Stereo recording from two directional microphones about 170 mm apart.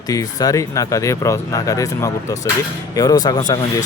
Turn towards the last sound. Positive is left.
turn(degrees=25)  # may be behind; listen again after turning